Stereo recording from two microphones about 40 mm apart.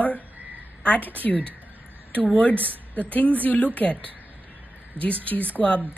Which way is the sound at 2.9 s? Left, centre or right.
Left.